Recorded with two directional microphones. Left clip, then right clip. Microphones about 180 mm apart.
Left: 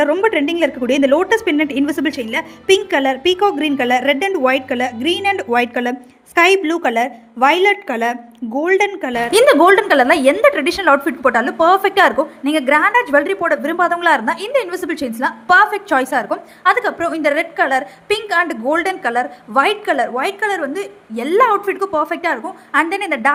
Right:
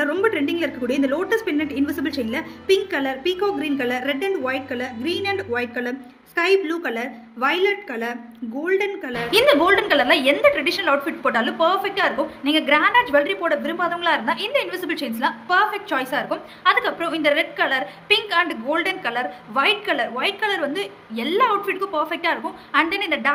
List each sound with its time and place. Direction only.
0.0 s a woman's voice: 50° left (ahead or behind)